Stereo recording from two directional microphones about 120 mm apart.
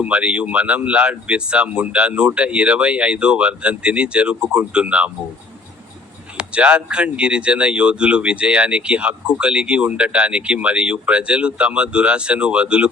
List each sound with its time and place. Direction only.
0.0 s speech: 10° right (ahead or behind)
6.3 s speech: 10° right (ahead or behind)